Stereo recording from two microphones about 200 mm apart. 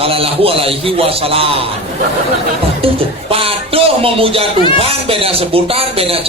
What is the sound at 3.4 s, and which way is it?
A man's voice, 30° right (ahead or behind).